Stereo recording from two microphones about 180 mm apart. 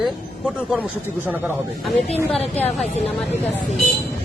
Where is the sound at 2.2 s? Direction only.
35° left (ahead or behind).